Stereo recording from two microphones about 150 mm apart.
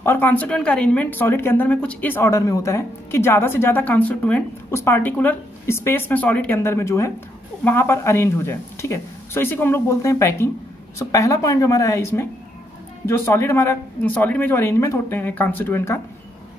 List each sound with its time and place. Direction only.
0.0 s a woman's voice: 15° left (ahead or behind)